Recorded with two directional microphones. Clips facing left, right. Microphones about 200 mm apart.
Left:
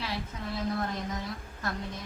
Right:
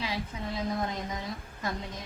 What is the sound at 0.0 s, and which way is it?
Speech, 15° right (ahead or behind).